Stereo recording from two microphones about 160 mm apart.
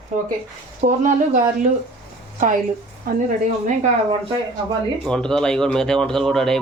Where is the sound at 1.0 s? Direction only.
50° right (ahead or behind).